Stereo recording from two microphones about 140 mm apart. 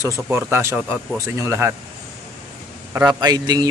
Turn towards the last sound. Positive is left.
turn(degrees=-30)  # may be behind; listen again after turning